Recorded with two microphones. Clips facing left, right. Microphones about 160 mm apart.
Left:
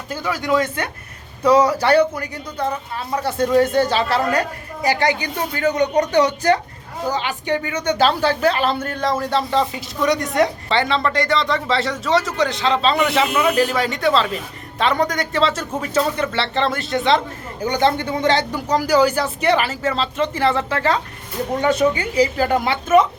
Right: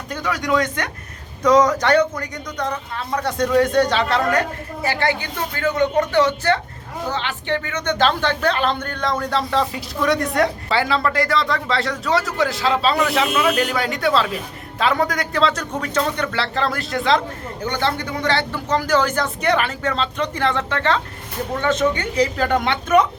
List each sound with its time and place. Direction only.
0.1 s a woman's voice: 5° left (ahead or behind)
17.7 s speech: 20° left (ahead or behind)